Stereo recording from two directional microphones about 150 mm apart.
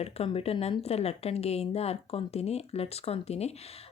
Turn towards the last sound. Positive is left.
turn(degrees=45)  # may be behind; listen again after turning